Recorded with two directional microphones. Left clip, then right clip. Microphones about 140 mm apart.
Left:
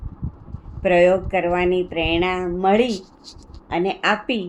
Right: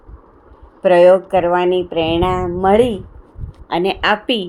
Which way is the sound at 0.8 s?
55° right (ahead or behind).